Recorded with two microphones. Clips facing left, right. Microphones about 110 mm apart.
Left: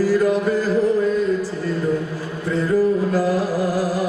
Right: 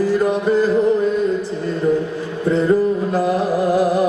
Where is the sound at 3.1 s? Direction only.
25° right (ahead or behind).